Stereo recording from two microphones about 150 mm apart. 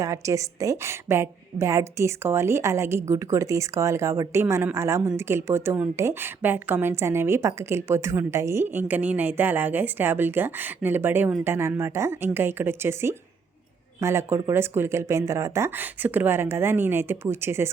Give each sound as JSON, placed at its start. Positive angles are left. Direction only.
{"t": 0.0, "sound": "a woman's voice", "side_deg": -20}